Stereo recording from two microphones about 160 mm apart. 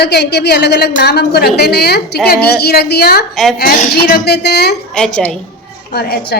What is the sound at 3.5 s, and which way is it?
A woman's voice, 65° left (ahead or behind).